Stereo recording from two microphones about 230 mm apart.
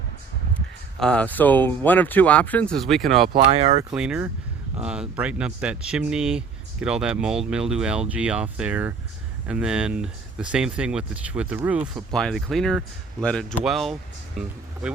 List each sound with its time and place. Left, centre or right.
0.9 s speech: centre
3.3 s speech: right
3.9 s speech: centre